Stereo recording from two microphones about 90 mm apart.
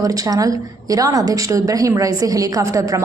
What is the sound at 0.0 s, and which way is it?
A woman's voice, 40° right (ahead or behind).